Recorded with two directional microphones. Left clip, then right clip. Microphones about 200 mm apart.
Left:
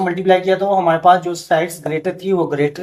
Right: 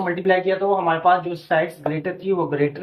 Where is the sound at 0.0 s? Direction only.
45° left (ahead or behind).